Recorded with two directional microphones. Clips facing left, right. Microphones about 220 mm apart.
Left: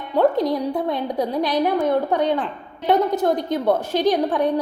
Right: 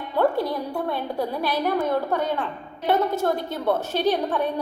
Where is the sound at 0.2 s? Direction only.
20° left (ahead or behind).